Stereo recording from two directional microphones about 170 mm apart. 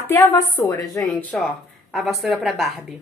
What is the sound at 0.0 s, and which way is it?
A woman's voice, 15° left (ahead or behind).